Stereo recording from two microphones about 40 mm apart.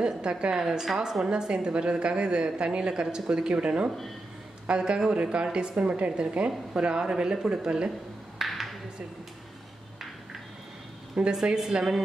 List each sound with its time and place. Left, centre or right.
0.0 s a woman's voice: right
1.2 s a woman's voice: right
5.8 s a woman's voice: right
8.4 s a sound: centre
11.3 s a woman's voice: centre